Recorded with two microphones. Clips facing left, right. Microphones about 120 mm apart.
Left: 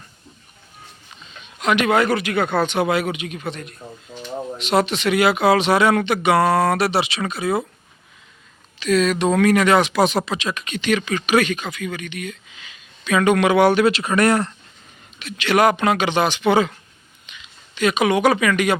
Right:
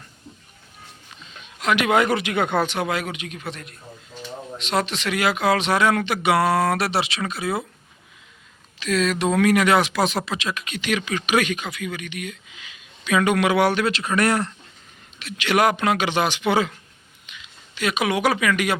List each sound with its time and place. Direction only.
1.4 s a sound: centre (ahead or behind)
1.9 s speech: 20° right (ahead or behind)
2.6 s speech: 5° left (ahead or behind)
8.8 s speech: centre (ahead or behind)
13.7 s speech: 5° left (ahead or behind)